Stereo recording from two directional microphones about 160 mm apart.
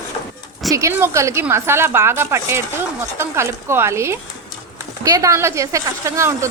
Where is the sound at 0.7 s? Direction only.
20° right (ahead or behind).